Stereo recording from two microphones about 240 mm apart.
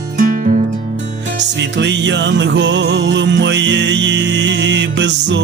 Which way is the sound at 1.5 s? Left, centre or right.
Right.